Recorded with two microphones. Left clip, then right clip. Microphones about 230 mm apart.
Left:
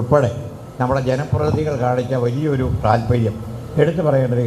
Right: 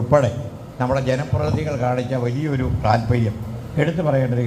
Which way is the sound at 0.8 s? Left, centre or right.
Left.